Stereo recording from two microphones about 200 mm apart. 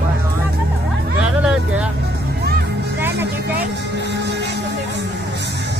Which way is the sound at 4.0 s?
60° right (ahead or behind).